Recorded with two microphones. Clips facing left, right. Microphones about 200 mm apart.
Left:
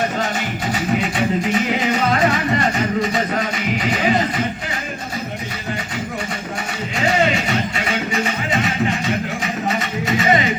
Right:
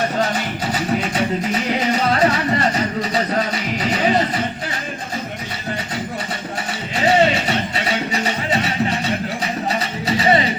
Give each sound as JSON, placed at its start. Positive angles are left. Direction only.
{"t": 0.3, "sound": "music", "side_deg": -40}
{"t": 6.9, "sound": "music", "side_deg": -35}